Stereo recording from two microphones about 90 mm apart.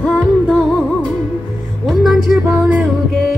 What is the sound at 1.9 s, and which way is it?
Music, 5° right (ahead or behind).